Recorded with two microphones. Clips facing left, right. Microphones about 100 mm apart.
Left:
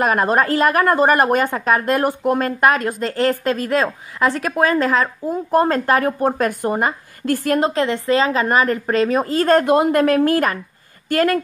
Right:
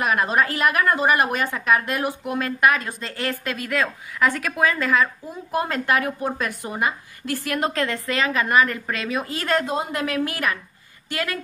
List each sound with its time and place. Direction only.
0.0 s a woman's voice: 40° left (ahead or behind)
7.5 s a woman's voice: 30° left (ahead or behind)
9.7 s a woman's voice: 55° left (ahead or behind)